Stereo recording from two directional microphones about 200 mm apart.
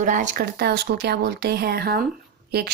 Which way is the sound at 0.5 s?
50° right (ahead or behind).